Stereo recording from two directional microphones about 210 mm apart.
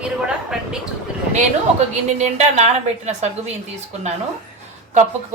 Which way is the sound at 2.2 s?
35° right (ahead or behind).